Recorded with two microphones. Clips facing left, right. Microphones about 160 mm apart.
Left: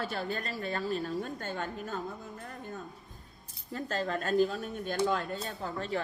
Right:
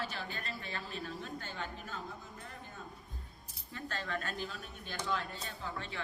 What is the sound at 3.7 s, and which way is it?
A woman's voice, 40° left (ahead or behind).